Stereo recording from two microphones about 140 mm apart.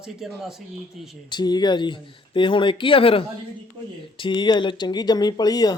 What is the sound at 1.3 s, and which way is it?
Speech, 30° left (ahead or behind).